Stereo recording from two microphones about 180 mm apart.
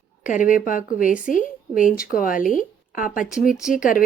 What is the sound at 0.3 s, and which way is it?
A woman's voice, 45° left (ahead or behind).